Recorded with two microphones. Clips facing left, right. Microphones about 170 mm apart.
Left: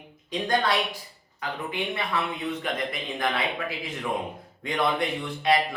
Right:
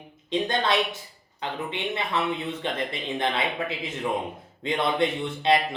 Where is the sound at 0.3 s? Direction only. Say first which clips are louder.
Right 1 dB; 25° right (ahead or behind).